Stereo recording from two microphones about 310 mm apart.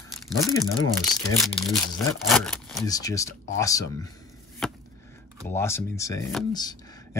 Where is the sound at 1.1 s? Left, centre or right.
Centre.